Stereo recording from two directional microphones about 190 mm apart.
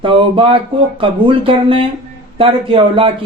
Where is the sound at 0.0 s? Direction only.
25° right (ahead or behind).